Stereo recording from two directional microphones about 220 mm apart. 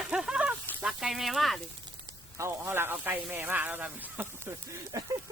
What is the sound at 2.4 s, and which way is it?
Speech, 10° right (ahead or behind).